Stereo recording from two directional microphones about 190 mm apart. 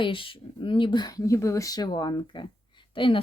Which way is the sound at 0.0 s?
25° left (ahead or behind).